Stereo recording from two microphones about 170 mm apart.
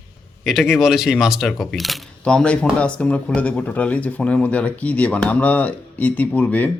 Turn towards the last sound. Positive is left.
turn(degrees=10)  # may be behind; listen again after turning